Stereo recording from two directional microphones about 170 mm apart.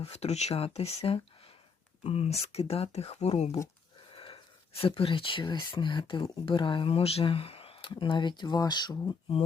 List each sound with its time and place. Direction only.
0.0 s speech: 40° left (ahead or behind)
4.1 s wheeze: 30° left (ahead or behind)
4.8 s speech: 30° left (ahead or behind)